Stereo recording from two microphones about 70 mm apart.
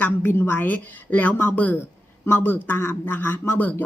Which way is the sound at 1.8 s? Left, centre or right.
Left.